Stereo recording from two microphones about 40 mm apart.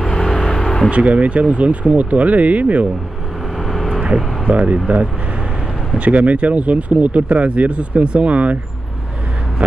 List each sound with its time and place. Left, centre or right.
0.1 s vehicle: centre
0.8 s speech: right
3.6 s vehicle: centre
4.0 s speech: right
5.9 s speech: right
9.6 s vehicle: right